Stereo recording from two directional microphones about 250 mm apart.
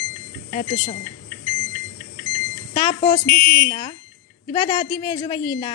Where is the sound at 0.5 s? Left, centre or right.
Left.